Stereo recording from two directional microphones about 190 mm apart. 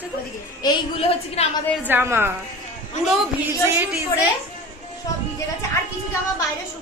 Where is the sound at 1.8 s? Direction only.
10° right (ahead or behind).